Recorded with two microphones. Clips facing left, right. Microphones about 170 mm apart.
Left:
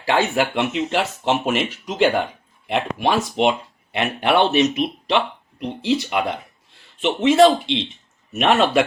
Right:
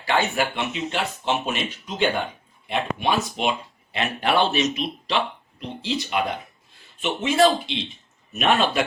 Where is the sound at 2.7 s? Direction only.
70° left (ahead or behind).